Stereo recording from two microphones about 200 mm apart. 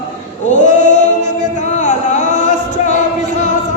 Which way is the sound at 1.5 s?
35° left (ahead or behind).